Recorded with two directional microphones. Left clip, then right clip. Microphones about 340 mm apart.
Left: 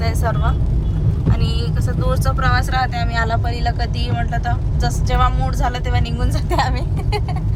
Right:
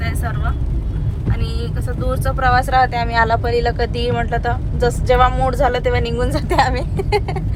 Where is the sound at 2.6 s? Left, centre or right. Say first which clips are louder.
Right 6 dB; centre.